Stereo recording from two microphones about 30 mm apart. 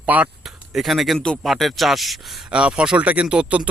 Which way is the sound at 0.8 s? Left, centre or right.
Centre.